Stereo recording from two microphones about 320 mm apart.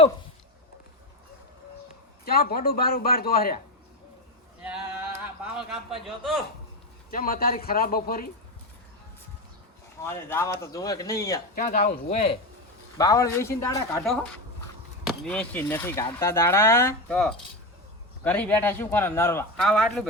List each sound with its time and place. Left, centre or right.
2.2 s a man's voice: left
4.6 s a sound: centre
7.1 s a man's voice: left
10.0 s speech: centre
11.5 s a man's voice: left; by 20.1 s centre